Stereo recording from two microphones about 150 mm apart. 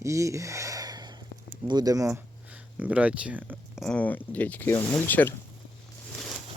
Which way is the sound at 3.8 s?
10° left (ahead or behind).